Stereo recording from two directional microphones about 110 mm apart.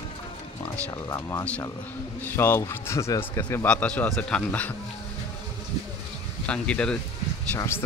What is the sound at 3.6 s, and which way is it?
Speech, 10° left (ahead or behind).